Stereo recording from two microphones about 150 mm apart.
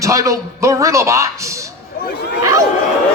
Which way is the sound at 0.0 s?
20° right (ahead or behind).